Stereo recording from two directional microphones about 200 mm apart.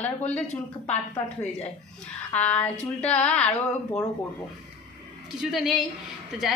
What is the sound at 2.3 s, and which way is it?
Speech, 5° left (ahead or behind).